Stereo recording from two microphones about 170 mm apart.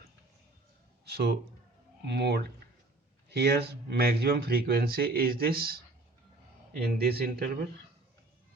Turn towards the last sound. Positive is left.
turn(degrees=-65)  # may be behind; listen again after turning